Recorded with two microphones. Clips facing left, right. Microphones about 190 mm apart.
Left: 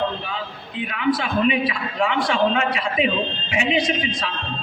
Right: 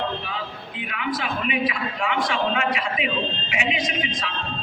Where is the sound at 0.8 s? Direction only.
30° left (ahead or behind).